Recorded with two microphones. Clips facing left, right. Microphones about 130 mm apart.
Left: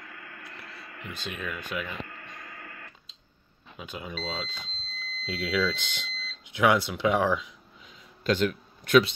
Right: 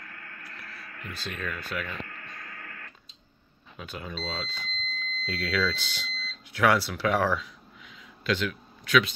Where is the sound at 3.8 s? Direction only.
15° left (ahead or behind).